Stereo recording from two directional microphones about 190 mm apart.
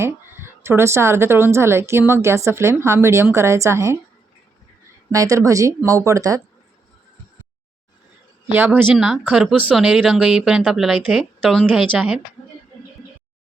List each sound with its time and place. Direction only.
0.0 s a woman's voice: 15° right (ahead or behind)
5.1 s a woman's voice: 15° right (ahead or behind)
8.4 s speech: 10° right (ahead or behind)